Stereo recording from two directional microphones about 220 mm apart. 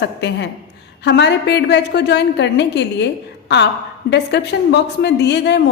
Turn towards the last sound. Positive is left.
turn(degrees=50)  # may be behind; listen again after turning